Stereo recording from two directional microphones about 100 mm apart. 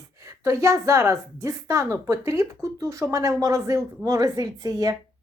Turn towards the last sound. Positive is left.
turn(degrees=-35)  # may be behind; listen again after turning